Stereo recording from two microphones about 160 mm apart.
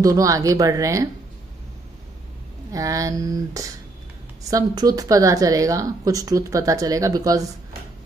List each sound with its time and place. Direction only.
0.0 s speech: 20° right (ahead or behind)
2.7 s speech: 20° right (ahead or behind)